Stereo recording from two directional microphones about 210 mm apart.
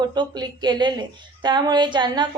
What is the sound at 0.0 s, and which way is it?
A woman's voice, 20° right (ahead or behind).